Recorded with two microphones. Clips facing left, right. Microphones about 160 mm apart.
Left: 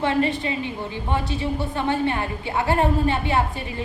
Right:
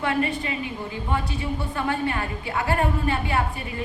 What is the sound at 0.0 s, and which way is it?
A woman's voice, 25° left (ahead or behind).